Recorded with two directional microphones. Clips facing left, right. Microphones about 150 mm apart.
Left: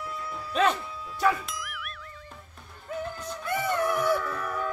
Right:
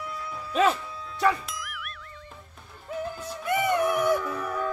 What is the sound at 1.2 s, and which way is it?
Music, centre (ahead or behind).